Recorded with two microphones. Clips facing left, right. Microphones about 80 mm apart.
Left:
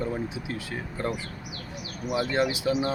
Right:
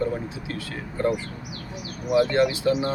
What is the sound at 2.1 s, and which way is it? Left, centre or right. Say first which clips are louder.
Speech: right 6 dB; centre.